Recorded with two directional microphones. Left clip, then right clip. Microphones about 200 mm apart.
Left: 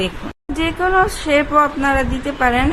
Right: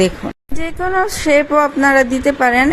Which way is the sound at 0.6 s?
25° right (ahead or behind).